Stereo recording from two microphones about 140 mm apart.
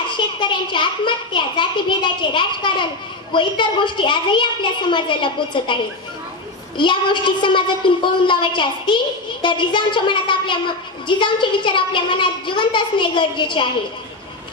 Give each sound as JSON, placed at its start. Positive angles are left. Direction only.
{"t": 0.4, "sound": "a woman's voice", "side_deg": 35}
{"t": 6.8, "sound": "a woman's voice", "side_deg": 35}